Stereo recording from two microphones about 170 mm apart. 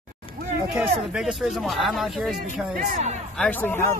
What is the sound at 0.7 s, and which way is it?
Speech, 5° right (ahead or behind).